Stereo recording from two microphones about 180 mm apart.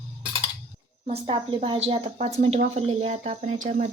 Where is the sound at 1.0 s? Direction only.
35° right (ahead or behind).